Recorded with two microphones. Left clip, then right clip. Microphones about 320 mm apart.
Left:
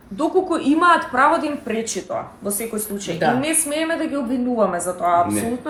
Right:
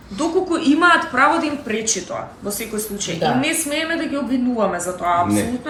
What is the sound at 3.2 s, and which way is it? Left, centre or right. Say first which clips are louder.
A woman's voice: even; centre.